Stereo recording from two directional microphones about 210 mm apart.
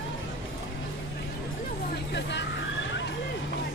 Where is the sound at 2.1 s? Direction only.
55° left (ahead or behind).